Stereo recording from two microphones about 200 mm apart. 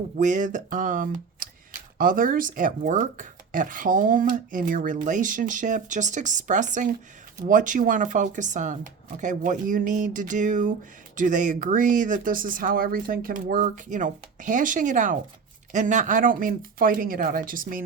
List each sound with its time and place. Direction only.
0.2 s speech: 40° right (ahead or behind)